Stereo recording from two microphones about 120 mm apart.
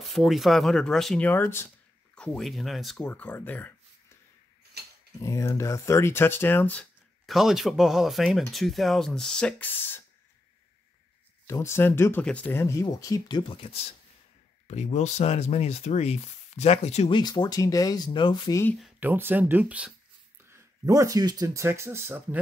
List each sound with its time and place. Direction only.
0.0 s speech: centre (ahead or behind); by 1.7 s 20° left (ahead or behind)
2.1 s speech: 5° left (ahead or behind)
3.1 s speech: 15° left (ahead or behind)
5.2 s speech: 25° left (ahead or behind)
7.2 s speech: 5° right (ahead or behind); by 10.0 s 15° left (ahead or behind)
11.4 s speech: 20° left (ahead or behind)
13.4 s speech: 45° left (ahead or behind)
14.7 s speech: 75° left (ahead or behind)
17.1 s speech: 35° left (ahead or behind)
18.9 s speech: 15° right (ahead or behind)
20.4 s speech: 25° right (ahead or behind)
21.6 s speech: 20° right (ahead or behind)